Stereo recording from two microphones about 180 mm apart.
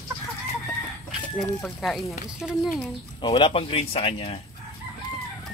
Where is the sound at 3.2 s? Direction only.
25° left (ahead or behind).